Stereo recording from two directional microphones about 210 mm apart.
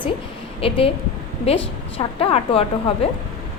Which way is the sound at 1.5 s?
25° left (ahead or behind).